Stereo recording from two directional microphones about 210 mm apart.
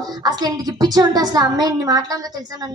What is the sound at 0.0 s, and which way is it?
A woman's voice, 20° right (ahead or behind).